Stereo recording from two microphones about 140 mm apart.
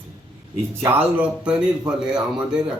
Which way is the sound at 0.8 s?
10° right (ahead or behind).